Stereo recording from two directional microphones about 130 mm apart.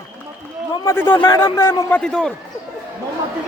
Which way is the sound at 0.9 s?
15° left (ahead or behind).